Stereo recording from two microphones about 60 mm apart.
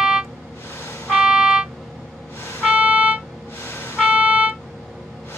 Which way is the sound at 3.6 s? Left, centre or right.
Left.